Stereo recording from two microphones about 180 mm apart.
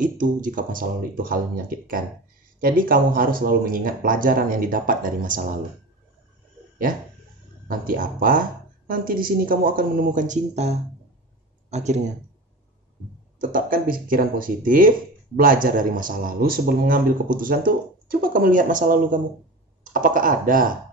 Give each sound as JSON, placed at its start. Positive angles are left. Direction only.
{"t": 0.0, "sound": "speech", "side_deg": -45}
{"t": 7.6, "sound": "speech", "side_deg": -50}
{"t": 13.4, "sound": "speech", "side_deg": -50}